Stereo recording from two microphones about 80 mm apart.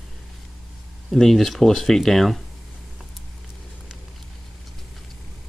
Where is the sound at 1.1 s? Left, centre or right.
Centre.